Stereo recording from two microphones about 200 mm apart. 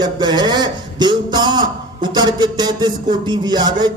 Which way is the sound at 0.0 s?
20° right (ahead or behind).